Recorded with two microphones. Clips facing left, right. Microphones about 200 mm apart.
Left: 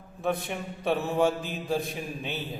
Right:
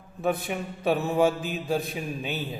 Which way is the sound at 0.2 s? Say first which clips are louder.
Right 2 dB; 5° right (ahead or behind).